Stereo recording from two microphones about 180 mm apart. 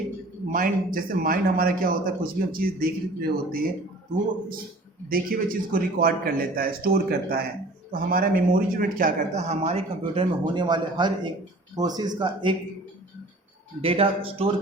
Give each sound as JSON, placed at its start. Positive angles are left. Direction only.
{"t": 0.5, "sound": "a man's voice", "side_deg": -50}
{"t": 5.0, "sound": "a man's voice", "side_deg": -50}
{"t": 9.5, "sound": "speech", "side_deg": -35}
{"t": 13.8, "sound": "a man's voice", "side_deg": -30}